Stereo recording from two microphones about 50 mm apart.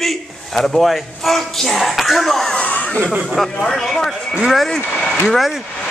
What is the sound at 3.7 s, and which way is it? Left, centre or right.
Speech, centre.